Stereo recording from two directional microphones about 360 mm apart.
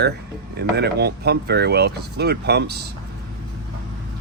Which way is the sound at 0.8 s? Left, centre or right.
Right.